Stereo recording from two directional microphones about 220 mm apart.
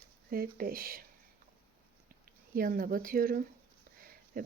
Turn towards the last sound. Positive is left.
turn(degrees=-40)  # may be behind; listen again after turning